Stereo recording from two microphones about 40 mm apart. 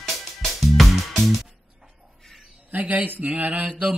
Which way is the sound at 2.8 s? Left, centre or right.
Right.